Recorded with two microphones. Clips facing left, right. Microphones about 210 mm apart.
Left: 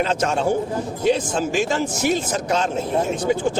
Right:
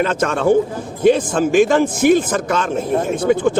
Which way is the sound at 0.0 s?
55° right (ahead or behind).